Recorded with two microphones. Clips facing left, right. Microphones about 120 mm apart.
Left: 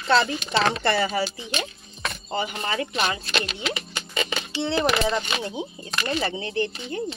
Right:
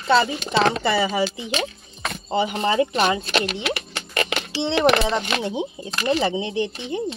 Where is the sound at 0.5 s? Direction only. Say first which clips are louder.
Right 3 dB; 55° right (ahead or behind).